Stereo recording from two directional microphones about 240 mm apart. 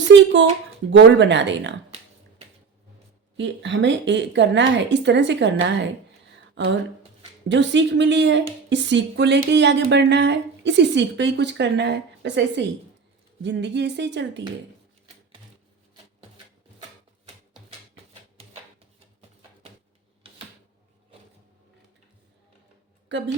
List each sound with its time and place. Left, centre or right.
0.9 s a woman's voice: right
3.3 s a woman's voice: right
23.0 s speech: right